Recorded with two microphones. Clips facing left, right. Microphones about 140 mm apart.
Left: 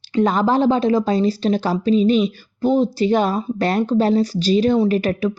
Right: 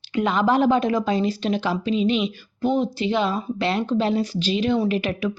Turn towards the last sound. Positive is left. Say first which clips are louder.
# left 5 dB
turn(degrees=40)  # may be behind; listen again after turning